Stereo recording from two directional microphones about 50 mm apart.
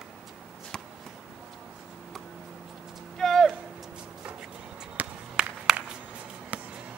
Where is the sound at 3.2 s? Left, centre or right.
Centre.